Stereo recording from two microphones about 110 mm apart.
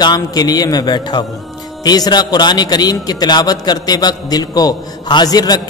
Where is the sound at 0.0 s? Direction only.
40° left (ahead or behind).